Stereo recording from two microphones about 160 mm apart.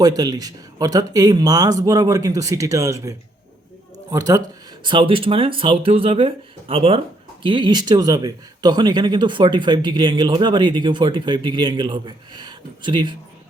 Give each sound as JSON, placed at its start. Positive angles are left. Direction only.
{"t": 0.0, "sound": "speech", "side_deg": -25}